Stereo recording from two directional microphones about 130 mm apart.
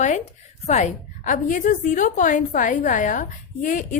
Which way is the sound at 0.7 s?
65° left (ahead or behind).